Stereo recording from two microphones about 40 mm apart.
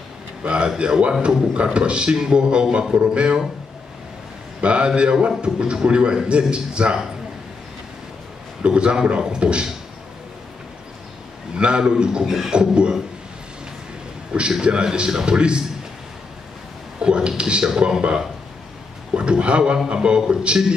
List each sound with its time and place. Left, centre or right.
0.4 s a man's voice: right
4.6 s a man's voice: right
8.6 s a man's voice: right
11.5 s a man's voice: right
14.6 s a man's voice: right
17.0 s a sound: right
17.4 s a man's voice: right